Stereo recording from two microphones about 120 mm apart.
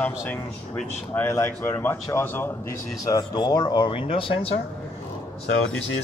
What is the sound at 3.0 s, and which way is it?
Speech, 35° left (ahead or behind).